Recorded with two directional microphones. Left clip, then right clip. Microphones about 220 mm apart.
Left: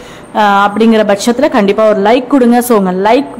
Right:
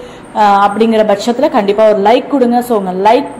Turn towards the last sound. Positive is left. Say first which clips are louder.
# left 1 dB
turn(degrees=20)  # may be behind; listen again after turning